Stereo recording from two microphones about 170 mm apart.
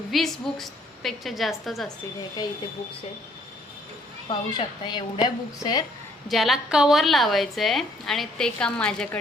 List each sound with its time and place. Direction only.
0.1 s a woman's voice: centre (ahead or behind)
4.3 s a woman's voice: 25° left (ahead or behind)
6.2 s a woman's voice: centre (ahead or behind)